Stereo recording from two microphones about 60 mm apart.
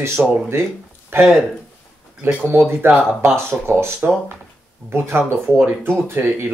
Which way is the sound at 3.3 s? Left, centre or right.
Right.